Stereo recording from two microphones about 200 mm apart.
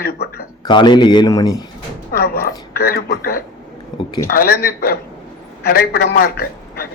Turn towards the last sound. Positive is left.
turn(degrees=50)  # may be behind; listen again after turning